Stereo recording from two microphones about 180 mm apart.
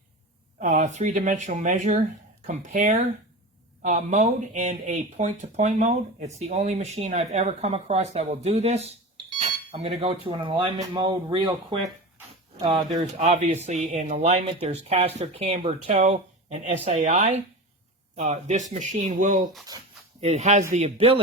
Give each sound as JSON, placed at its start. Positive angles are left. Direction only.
{"t": 0.6, "sound": "speech", "side_deg": -40}